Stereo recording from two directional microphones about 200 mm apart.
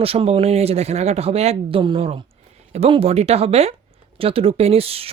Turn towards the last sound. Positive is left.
turn(degrees=-30)  # may be behind; listen again after turning